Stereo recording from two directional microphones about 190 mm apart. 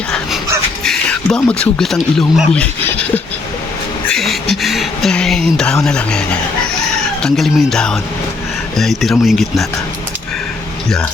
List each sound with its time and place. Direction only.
0.9 s speech: 5° left (ahead or behind)
4.1 s a sound: centre (ahead or behind)
5.8 s speech: 5° left (ahead or behind)
10.8 s speech: centre (ahead or behind)